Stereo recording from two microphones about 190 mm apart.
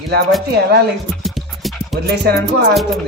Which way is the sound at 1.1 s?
Centre (ahead or behind).